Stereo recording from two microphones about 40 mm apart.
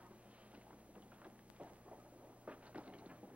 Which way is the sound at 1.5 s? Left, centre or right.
Right.